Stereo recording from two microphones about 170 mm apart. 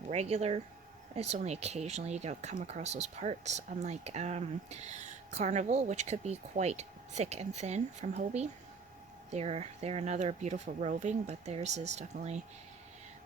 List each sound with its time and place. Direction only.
0.1 s speech: 40° right (ahead or behind)